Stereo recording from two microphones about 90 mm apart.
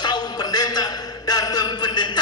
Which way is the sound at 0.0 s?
50° left (ahead or behind).